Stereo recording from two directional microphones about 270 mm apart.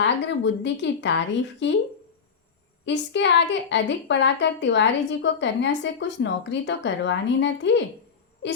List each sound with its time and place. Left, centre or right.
0.0 s a woman's voice: left
2.8 s a woman's voice: left